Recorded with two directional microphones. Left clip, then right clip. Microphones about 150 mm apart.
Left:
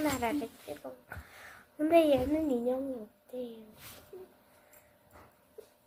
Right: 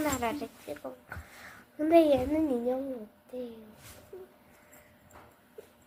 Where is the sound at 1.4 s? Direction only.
5° right (ahead or behind).